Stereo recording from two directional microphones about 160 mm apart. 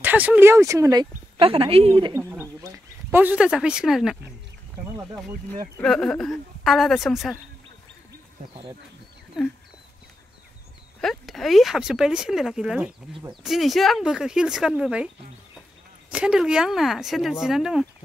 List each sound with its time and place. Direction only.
0.0 s speech: 10° right (ahead or behind)
1.4 s a woman's voice: 35° right (ahead or behind)
2.1 s speech: 15° right (ahead or behind)
5.8 s speech: 5° left (ahead or behind)
11.0 s speech: centre (ahead or behind)
16.1 s speech: 5° right (ahead or behind)